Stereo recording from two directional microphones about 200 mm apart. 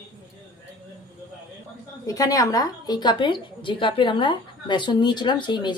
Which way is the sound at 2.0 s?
15° left (ahead or behind).